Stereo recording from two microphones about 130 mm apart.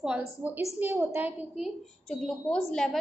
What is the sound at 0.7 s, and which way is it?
Speech, 15° right (ahead or behind).